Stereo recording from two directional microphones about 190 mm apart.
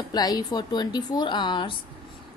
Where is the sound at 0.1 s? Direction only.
20° left (ahead or behind).